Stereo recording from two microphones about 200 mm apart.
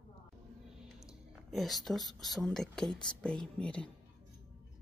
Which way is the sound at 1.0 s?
Centre (ahead or behind).